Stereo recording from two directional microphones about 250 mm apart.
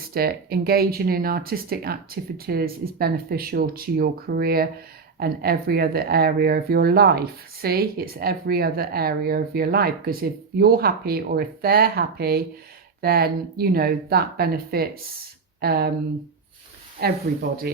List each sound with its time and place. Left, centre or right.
0.1 s speech: right
17.0 s speech: right